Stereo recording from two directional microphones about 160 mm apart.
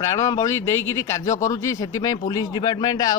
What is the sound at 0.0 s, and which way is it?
A man's voice, 20° left (ahead or behind).